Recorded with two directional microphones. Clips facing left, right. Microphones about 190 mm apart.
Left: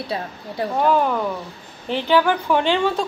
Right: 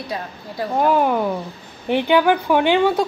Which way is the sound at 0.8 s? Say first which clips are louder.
Right 2 dB; 10° right (ahead or behind).